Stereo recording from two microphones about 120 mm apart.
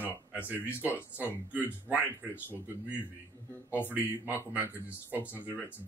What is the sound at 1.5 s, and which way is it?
Speech, 15° right (ahead or behind).